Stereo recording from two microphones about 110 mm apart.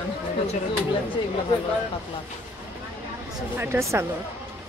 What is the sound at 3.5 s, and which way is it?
Speech, 20° right (ahead or behind).